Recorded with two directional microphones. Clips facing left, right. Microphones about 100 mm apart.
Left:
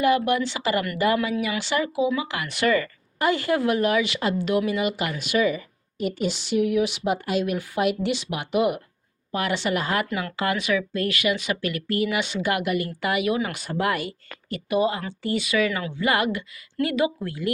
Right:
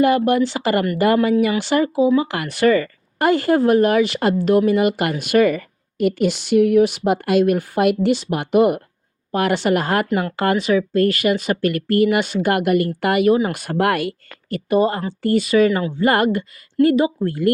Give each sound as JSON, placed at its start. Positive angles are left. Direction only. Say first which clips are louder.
{"t": 0.0, "sound": "speech", "louder": "right 5 dB", "side_deg": -45}
{"t": 3.2, "sound": "speech", "louder": "right 6 dB", "side_deg": -45}
{"t": 13.3, "sound": "speech", "louder": "right 8 dB", "side_deg": -35}
{"t": 13.6, "sound": "speech", "louder": "right 6 dB", "side_deg": -60}
{"t": 14.5, "sound": "speech", "louder": "right 5 dB", "side_deg": -45}